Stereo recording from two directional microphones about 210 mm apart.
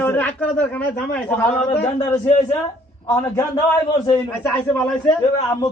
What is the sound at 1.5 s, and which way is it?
Speech, 30° left (ahead or behind).